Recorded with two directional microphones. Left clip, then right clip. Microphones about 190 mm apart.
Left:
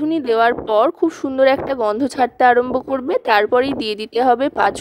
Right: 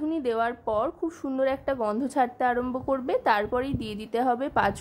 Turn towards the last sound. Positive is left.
turn(degrees=45)  # may be behind; listen again after turning